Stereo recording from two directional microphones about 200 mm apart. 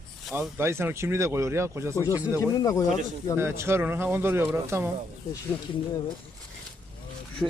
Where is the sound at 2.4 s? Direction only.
15° left (ahead or behind).